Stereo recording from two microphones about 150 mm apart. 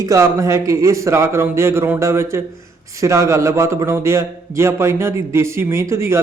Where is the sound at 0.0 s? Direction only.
20° right (ahead or behind).